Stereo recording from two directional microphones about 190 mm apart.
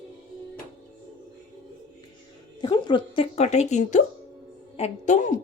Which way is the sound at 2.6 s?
25° left (ahead or behind).